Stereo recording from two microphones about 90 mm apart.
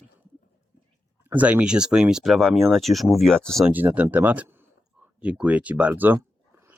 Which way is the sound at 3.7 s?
20° right (ahead or behind).